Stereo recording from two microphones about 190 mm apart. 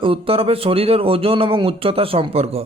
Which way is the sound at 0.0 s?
30° right (ahead or behind).